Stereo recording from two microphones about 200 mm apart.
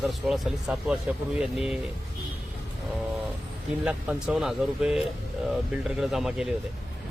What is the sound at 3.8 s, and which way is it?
Speech, 5° right (ahead or behind).